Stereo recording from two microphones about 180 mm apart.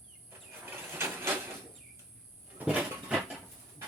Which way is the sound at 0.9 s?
10° right (ahead or behind).